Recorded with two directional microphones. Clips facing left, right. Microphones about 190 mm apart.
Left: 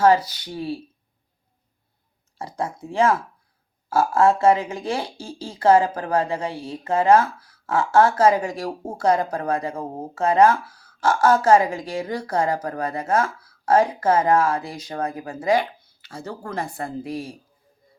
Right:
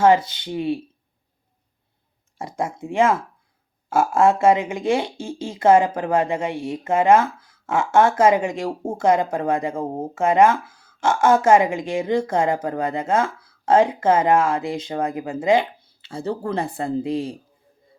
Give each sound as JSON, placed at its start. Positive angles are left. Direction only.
{"t": 0.0, "sound": "speech", "side_deg": -25}
{"t": 2.8, "sound": "speech", "side_deg": -25}